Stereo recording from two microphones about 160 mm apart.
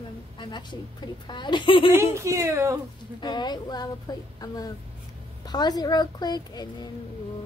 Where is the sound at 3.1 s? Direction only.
30° left (ahead or behind).